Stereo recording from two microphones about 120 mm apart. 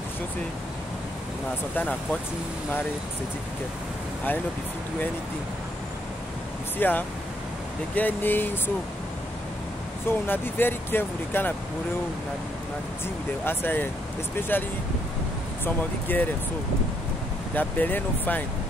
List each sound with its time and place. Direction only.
1.8 s speech: 15° left (ahead or behind)
6.8 s speech: 15° left (ahead or behind)
10.0 s speech: 20° left (ahead or behind)
13.5 s speech: 15° left (ahead or behind)
17.6 s speech: 15° left (ahead or behind)